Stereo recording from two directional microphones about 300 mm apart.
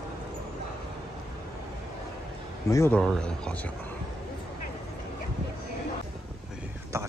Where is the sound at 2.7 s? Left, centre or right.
Centre.